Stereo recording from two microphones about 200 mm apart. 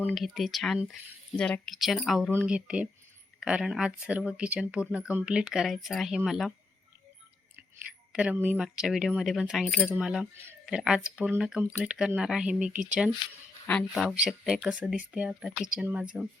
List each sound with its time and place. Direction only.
0.0 s speech: centre (ahead or behind)
7.5 s speech: 5° right (ahead or behind)